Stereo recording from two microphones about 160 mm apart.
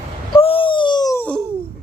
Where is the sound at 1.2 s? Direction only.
10° left (ahead or behind).